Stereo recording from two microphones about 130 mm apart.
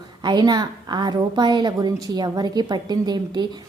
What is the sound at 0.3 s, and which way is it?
A woman's voice, 35° right (ahead or behind).